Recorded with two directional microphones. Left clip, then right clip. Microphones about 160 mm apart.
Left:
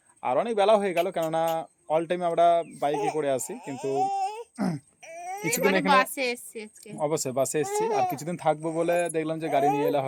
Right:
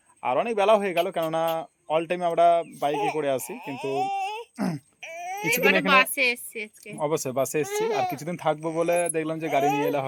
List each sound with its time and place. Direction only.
0.2 s speech: centre (ahead or behind)
3.8 s baby cry: 30° left (ahead or behind)
4.5 s a child's voice: 5° right (ahead or behind)
5.0 s a sound: 25° left (ahead or behind)
5.9 s a woman's voice: 35° left (ahead or behind)
7.0 s speech: 10° right (ahead or behind)